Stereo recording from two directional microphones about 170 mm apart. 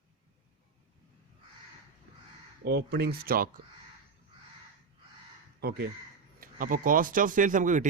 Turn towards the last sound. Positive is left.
turn(degrees=-50)  # may be behind; listen again after turning